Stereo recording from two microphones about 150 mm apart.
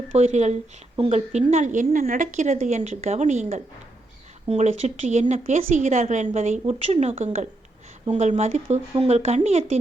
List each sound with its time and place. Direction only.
0.1 s a woman's voice: 45° right (ahead or behind)